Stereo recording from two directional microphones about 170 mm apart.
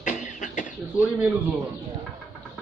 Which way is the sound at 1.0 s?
5° right (ahead or behind).